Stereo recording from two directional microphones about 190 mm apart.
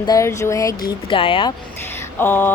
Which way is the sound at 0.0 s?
15° left (ahead or behind).